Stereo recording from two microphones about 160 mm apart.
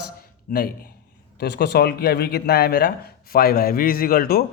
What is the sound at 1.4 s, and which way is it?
A man's voice, 90° left.